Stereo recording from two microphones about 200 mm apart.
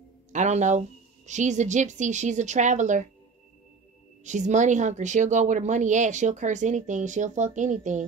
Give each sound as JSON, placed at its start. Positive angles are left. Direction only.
{"t": 0.3, "sound": "speech", "side_deg": -35}
{"t": 4.2, "sound": "speech", "side_deg": -35}